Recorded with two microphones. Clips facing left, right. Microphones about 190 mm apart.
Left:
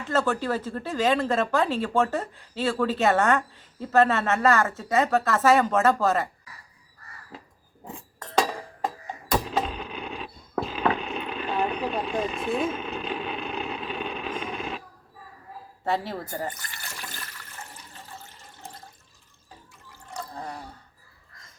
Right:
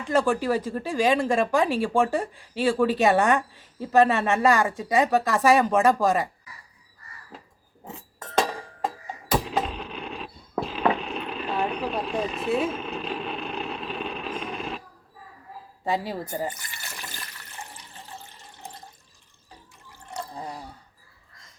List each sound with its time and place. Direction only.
0.1 s speech: 10° right (ahead or behind)
9.3 s a sound: 5° right (ahead or behind)
15.8 s a woman's voice: 10° right (ahead or behind)
20.1 s water: 15° right (ahead or behind)